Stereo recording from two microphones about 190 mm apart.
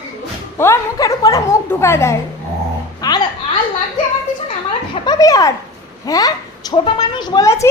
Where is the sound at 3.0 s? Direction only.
20° left (ahead or behind).